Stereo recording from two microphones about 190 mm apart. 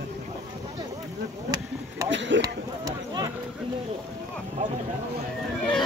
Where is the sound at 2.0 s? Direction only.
75° right (ahead or behind).